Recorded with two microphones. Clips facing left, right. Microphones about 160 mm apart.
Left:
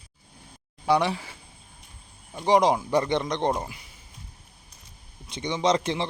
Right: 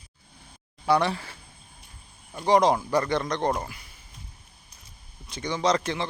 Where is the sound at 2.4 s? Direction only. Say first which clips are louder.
Even; 15° left (ahead or behind).